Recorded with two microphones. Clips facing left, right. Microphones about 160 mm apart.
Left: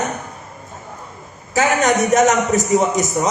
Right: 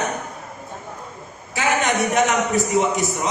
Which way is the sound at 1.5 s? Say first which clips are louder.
Left 5 dB; 40° left (ahead or behind).